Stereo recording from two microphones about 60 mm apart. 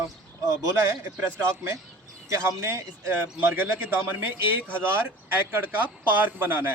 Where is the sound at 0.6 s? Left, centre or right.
Right.